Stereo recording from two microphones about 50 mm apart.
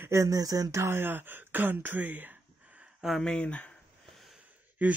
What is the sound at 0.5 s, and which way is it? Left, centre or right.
Speech, right.